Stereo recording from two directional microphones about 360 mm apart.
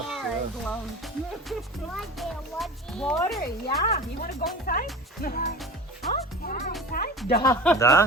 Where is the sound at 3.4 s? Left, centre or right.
Left.